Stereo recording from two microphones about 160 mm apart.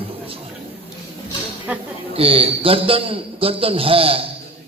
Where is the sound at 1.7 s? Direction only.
10° right (ahead or behind).